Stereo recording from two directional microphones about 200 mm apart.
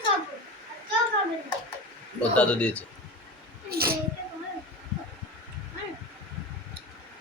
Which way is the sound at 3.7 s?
50° right (ahead or behind).